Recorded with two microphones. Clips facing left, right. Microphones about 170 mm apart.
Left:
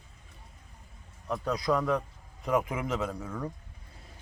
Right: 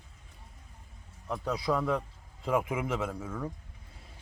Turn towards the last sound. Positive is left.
turn(degrees=-5)  # may be behind; listen again after turning